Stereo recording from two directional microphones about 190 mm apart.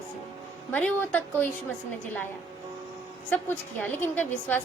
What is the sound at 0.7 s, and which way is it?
Speech, 10° left (ahead or behind).